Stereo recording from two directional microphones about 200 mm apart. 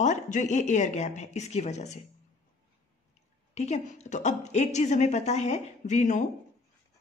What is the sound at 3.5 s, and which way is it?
A woman's voice, 35° left (ahead or behind).